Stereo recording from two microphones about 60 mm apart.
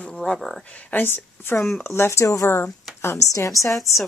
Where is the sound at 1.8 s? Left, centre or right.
Left.